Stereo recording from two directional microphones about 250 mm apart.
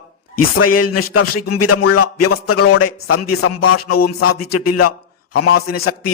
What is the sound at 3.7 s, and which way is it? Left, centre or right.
A man's voice, left.